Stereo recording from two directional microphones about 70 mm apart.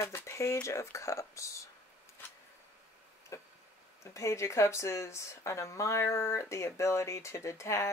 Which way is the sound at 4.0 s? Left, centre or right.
Left.